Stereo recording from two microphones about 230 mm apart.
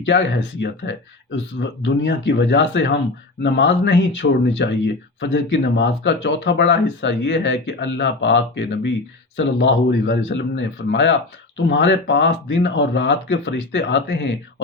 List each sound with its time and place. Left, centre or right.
0.6 s speech: left